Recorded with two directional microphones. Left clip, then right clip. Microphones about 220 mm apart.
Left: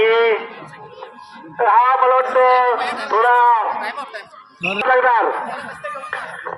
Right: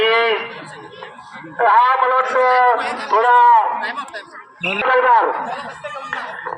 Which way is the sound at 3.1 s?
35° right (ahead or behind).